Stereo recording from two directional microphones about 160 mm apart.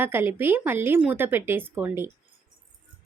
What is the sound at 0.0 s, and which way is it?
Speech, 15° right (ahead or behind).